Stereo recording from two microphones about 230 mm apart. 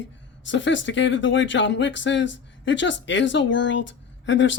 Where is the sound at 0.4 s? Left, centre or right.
Left.